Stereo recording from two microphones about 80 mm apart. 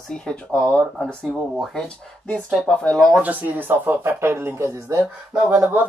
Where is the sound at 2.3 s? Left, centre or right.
Centre.